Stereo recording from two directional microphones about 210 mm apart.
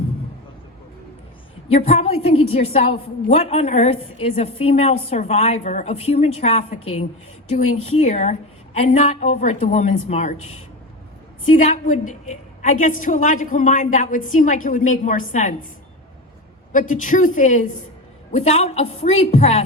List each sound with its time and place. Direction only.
1.7 s a woman's voice: 30° left (ahead or behind)
16.7 s a woman's voice: 40° left (ahead or behind)